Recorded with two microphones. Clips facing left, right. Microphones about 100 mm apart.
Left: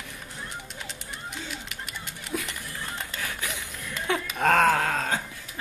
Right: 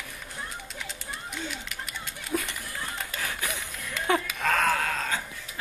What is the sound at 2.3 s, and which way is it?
Run, 15° right (ahead or behind).